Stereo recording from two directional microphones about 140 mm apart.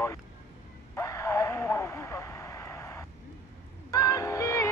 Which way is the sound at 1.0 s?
20° left (ahead or behind).